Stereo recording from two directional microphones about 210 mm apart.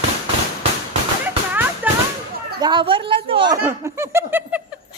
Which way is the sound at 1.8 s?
10° right (ahead or behind).